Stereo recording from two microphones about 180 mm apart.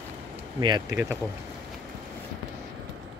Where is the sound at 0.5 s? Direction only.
25° right (ahead or behind).